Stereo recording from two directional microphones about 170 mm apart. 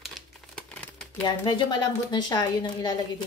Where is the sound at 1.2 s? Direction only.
25° left (ahead or behind).